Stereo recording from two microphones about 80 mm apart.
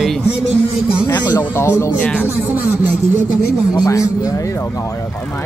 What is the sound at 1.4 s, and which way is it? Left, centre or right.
Speech, left.